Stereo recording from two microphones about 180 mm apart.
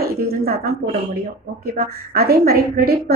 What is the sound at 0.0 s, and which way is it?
A woman's voice, 60° right (ahead or behind).